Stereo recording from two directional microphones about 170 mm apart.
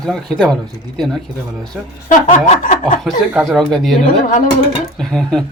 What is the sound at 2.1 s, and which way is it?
Chuckle, 45° left (ahead or behind).